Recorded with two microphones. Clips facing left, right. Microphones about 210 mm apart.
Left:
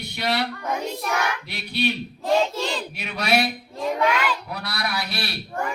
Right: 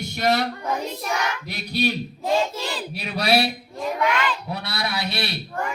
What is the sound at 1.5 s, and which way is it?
Speech, 40° right (ahead or behind).